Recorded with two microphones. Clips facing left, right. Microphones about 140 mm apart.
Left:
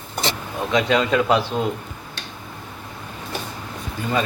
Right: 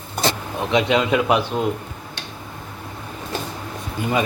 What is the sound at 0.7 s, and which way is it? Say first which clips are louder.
Speech: right 1 dB; 20° right (ahead or behind).